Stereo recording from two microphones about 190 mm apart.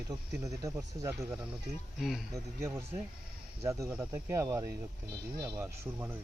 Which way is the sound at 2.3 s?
15° right (ahead or behind).